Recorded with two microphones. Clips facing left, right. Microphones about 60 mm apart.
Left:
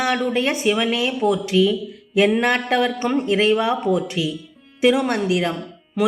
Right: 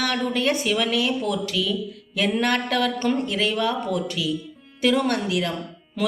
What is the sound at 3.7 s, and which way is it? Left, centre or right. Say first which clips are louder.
Speech: left 5 dB; centre.